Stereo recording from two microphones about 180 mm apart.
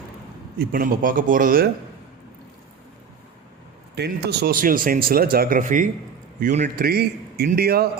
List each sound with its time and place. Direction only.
0.6 s speech: 50° right (ahead or behind)
3.9 s speech: 65° right (ahead or behind)